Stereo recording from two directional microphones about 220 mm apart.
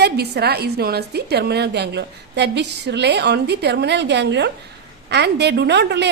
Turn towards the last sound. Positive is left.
turn(degrees=-50)  # may be behind; listen again after turning